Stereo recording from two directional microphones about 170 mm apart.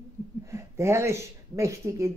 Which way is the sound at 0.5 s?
15° right (ahead or behind).